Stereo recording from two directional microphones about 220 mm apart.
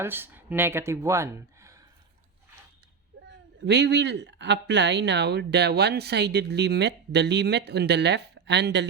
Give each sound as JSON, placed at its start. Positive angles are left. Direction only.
{"t": 0.0, "sound": "speech", "side_deg": -10}
{"t": 3.7, "sound": "speech", "side_deg": -50}